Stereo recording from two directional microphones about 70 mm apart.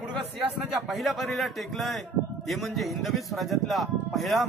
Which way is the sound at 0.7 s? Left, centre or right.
Centre.